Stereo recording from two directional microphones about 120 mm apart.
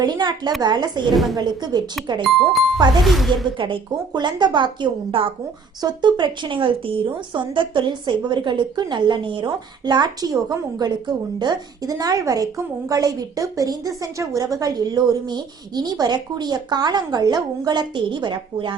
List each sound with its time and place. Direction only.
0.0 s a woman's voice: 35° right (ahead or behind)
1.1 s speech: centre (ahead or behind)
1.4 s a woman's voice: 35° right (ahead or behind)
2.2 s speech: centre (ahead or behind)
3.6 s a woman's voice: 40° right (ahead or behind)